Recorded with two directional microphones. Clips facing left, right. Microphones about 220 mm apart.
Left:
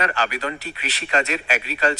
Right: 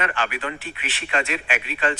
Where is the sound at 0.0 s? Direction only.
40° left (ahead or behind).